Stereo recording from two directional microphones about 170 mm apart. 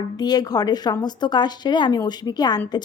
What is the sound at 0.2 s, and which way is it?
Speech, 25° left (ahead or behind).